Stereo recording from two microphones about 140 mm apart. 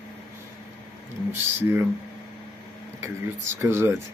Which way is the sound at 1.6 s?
15° right (ahead or behind).